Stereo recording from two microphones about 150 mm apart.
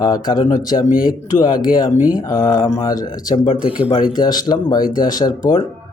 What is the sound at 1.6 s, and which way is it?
Speech, 25° left (ahead or behind).